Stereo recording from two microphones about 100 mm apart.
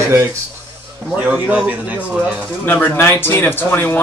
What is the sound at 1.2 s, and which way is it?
A man's voice, 15° right (ahead or behind).